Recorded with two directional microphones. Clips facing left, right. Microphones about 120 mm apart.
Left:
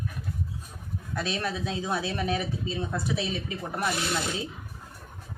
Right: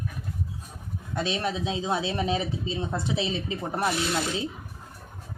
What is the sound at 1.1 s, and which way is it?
Speech, 20° right (ahead or behind).